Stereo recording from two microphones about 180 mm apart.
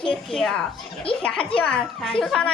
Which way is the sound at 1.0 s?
30° left (ahead or behind).